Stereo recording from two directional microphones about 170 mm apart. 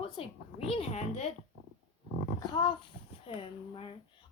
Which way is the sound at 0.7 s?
40° left (ahead or behind).